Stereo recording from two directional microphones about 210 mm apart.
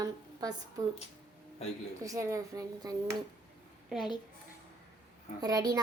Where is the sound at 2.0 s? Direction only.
15° right (ahead or behind).